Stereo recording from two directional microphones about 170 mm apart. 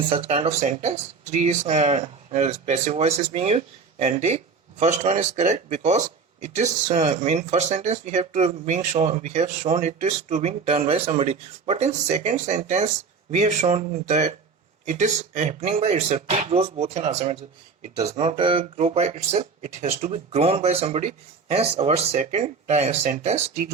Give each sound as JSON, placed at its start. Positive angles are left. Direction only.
{"t": 0.1, "sound": "speech", "side_deg": -35}
{"t": 17.9, "sound": "speech", "side_deg": -20}
{"t": 18.3, "sound": "speech", "side_deg": -30}